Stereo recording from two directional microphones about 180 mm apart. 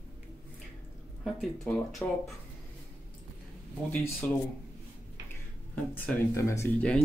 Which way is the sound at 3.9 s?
5° left (ahead or behind).